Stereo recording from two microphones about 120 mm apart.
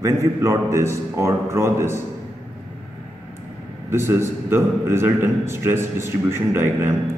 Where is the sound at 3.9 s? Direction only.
20° right (ahead or behind).